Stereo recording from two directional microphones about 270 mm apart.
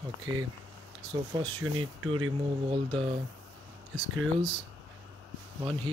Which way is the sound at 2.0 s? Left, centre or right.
Right.